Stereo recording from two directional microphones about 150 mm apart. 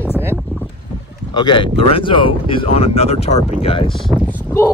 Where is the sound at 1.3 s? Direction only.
30° left (ahead or behind).